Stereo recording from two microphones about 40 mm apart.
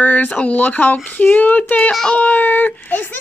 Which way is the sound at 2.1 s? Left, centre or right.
Left.